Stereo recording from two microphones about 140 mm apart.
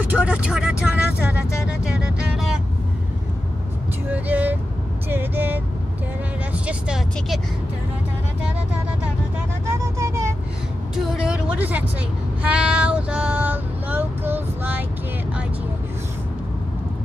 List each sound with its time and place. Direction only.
0.0 s vehicle: 10° right (ahead or behind)
4.1 s vehicle: 10° right (ahead or behind)
9.7 s vehicle: 20° right (ahead or behind)
11.1 s music: 5° right (ahead or behind)
12.4 s child singing: 10° right (ahead or behind)